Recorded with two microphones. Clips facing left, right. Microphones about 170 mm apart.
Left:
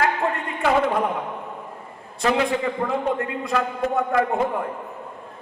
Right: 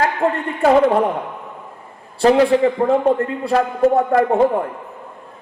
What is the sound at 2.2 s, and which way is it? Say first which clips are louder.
A man's voice: right 9 dB; 35° right (ahead or behind).